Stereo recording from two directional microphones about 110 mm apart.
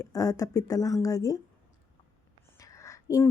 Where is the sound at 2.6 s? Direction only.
30° left (ahead or behind).